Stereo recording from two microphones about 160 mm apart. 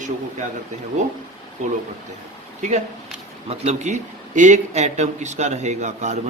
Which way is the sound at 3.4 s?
45° right (ahead or behind).